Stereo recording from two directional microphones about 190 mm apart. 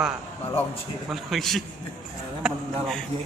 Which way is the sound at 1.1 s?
Centre (ahead or behind).